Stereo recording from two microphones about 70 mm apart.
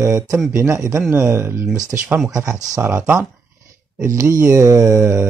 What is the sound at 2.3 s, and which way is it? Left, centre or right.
Speech, right.